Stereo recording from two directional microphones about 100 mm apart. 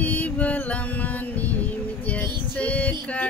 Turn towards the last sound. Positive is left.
turn(degrees=15)  # may be behind; listen again after turning